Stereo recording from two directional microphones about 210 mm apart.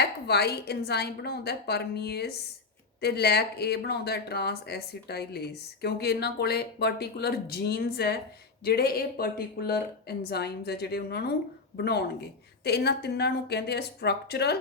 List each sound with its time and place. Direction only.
0.0 s speech: 50° left (ahead or behind)